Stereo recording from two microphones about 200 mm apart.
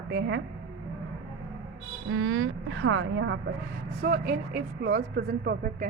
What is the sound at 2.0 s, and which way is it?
Speech, 90° right.